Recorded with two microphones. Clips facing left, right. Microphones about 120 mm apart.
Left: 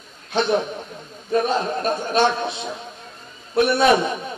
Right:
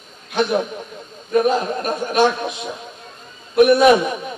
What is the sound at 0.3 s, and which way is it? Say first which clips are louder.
A man's voice: right 1 dB; 30° left (ahead or behind).